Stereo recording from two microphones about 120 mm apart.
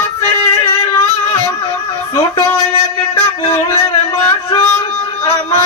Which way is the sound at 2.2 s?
25° left (ahead or behind).